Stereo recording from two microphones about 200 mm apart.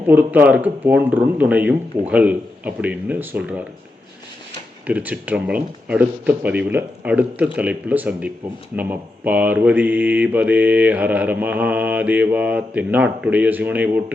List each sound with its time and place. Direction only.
0.0 s mantra: 10° right (ahead or behind)
4.9 s mantra: 10° right (ahead or behind)